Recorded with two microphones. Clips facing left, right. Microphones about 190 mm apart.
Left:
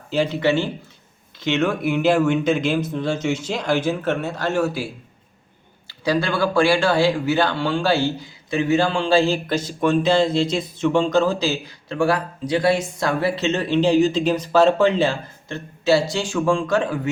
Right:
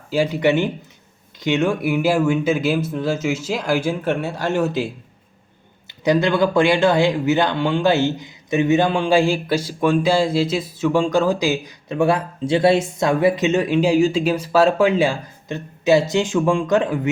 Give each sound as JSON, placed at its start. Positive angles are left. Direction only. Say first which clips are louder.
{"t": 0.1, "sound": "speech", "louder": "right 2 dB", "side_deg": -10}
{"t": 5.9, "sound": "speech", "louder": "right 4 dB", "side_deg": -20}